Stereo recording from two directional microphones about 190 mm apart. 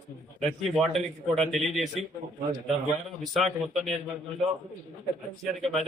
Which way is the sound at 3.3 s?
Centre (ahead or behind).